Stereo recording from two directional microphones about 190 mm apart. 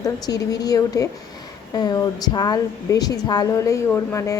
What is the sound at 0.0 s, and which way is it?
A woman's voice, 20° left (ahead or behind).